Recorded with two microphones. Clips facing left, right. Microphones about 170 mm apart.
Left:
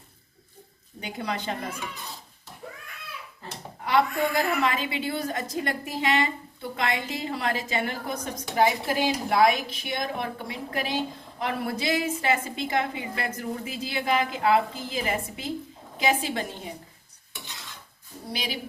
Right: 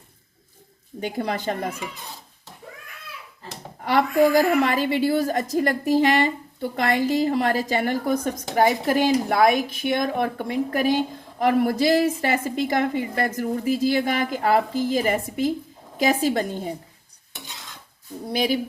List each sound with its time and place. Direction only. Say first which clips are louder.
1.0 s a woman's voice: right 6 dB; 45° right (ahead or behind)
3.9 s a woman's voice: right 6 dB; 45° right (ahead or behind)
18.3 s a woman's voice: right 11 dB; 45° right (ahead or behind)